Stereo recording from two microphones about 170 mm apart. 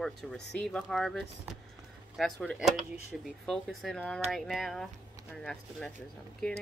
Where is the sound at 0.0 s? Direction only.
5° left (ahead or behind).